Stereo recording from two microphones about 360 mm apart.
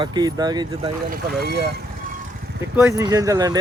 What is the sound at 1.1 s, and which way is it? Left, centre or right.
Speech, right.